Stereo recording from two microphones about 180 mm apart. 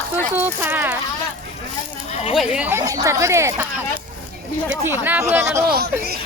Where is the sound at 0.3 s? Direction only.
10° right (ahead or behind).